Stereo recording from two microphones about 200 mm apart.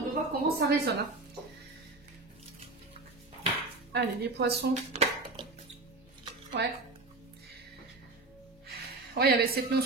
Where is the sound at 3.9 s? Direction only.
55° right (ahead or behind).